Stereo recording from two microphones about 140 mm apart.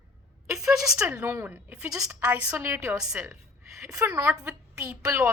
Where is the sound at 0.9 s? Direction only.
15° right (ahead or behind).